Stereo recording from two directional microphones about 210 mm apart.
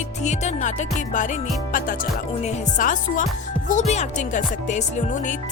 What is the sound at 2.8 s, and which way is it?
Speech, 40° left (ahead or behind).